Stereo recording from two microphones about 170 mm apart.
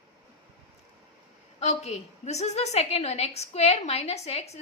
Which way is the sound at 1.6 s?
40° left (ahead or behind).